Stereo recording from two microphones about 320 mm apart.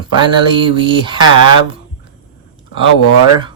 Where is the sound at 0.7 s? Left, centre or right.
Centre.